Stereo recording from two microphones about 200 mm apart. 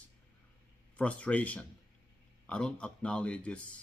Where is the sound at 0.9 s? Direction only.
5° left (ahead or behind).